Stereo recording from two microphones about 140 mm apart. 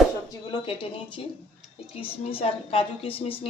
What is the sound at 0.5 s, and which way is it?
A woman's voice, 40° left (ahead or behind).